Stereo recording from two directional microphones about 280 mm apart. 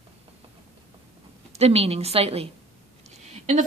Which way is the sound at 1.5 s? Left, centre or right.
Right.